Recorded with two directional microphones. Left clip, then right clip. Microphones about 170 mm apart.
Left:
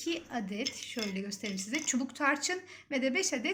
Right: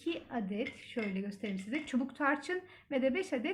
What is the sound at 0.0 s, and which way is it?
Speech, 35° right (ahead or behind).